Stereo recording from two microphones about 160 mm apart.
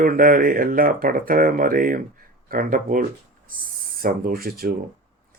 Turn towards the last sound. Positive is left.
turn(degrees=-70)  # may be behind; listen again after turning